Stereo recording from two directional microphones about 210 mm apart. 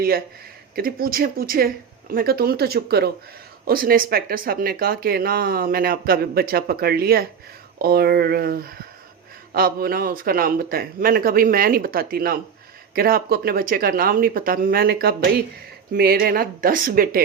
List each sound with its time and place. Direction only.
0.8 s speech: 45° right (ahead or behind)